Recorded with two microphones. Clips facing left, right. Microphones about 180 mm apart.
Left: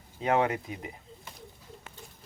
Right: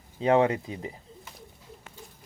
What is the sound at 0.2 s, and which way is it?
Speech, 30° right (ahead or behind).